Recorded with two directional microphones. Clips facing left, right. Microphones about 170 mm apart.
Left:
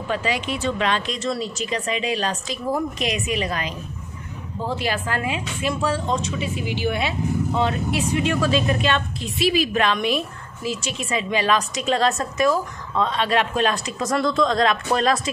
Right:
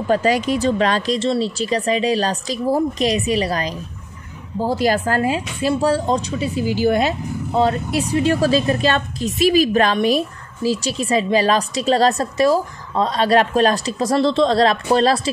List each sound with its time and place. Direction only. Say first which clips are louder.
0.1 s speech: right 8 dB; 40° right (ahead or behind)